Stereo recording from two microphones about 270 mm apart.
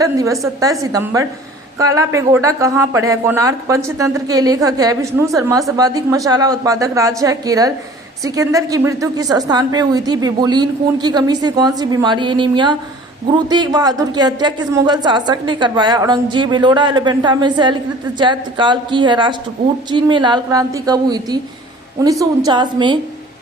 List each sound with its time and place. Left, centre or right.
0.0 s speech: centre